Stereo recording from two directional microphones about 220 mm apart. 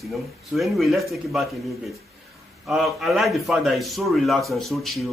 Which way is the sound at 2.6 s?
Centre (ahead or behind).